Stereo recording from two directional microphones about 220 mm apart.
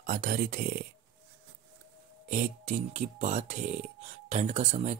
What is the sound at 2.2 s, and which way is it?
Speech, 35° right (ahead or behind).